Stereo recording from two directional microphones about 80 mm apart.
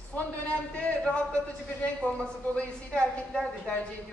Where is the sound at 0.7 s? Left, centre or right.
Centre.